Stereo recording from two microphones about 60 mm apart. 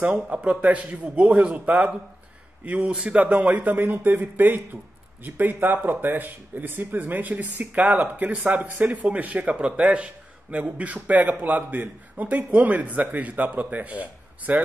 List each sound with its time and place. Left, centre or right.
0.0 s a man's voice: right